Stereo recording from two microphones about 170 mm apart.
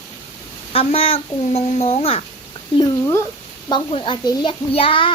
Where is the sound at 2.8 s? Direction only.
15° left (ahead or behind).